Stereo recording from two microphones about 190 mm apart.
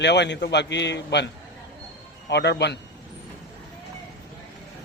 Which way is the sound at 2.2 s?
65° left (ahead or behind).